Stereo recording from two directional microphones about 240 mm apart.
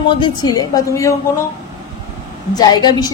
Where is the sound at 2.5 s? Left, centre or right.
Centre.